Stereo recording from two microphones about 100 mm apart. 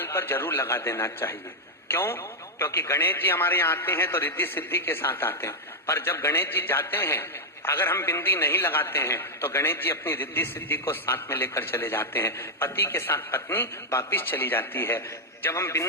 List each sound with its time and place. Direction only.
0.0 s a man's voice: 25° left (ahead or behind)